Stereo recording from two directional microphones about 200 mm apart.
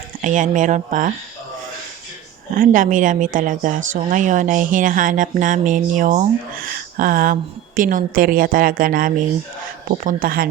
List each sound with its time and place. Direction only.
0.2 s speech: 40° right (ahead or behind)
2.5 s a woman's voice: 40° right (ahead or behind)